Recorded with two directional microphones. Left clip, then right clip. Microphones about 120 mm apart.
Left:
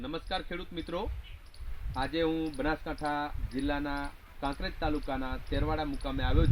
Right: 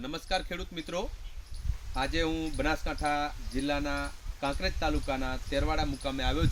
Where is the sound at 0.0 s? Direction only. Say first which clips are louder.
Right 3 dB; 35° right (ahead or behind).